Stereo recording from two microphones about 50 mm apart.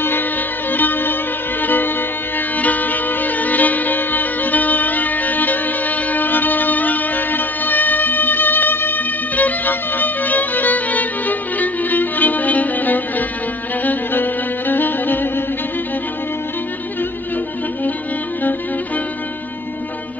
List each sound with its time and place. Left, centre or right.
0.7 s music: left